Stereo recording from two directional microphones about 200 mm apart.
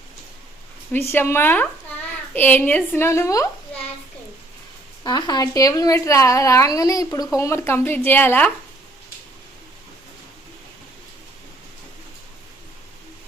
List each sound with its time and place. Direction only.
0.9 s a woman's voice: 10° left (ahead or behind)
5.0 s a woman's voice: 20° left (ahead or behind)